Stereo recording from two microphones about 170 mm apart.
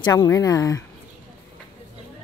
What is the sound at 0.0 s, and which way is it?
Speech, 20° left (ahead or behind).